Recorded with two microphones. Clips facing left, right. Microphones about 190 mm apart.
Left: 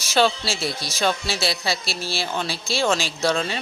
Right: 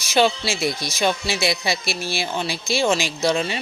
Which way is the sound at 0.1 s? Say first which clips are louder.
Right 1 dB; 10° right (ahead or behind).